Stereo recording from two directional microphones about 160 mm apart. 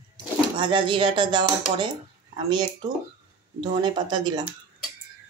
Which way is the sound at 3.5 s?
30° right (ahead or behind).